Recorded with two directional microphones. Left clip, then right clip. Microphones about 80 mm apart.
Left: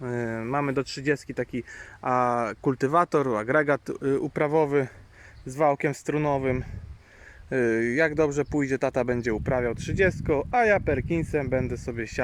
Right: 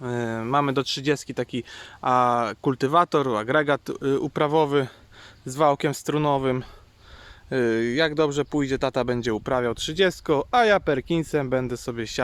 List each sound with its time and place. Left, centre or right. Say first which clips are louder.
0.0 s a sound: right 2 dB; centre
0.3 s speech: right 6 dB; right
1.7 s speech: right 4 dB; centre
5.5 s speech: right 2 dB; right
7.5 s speech: right 1 dB; centre
9.3 s speech: right 2 dB; right
10.8 s speech: right 3 dB; right